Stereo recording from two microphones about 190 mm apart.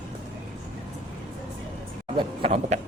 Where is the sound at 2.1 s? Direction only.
30° right (ahead or behind).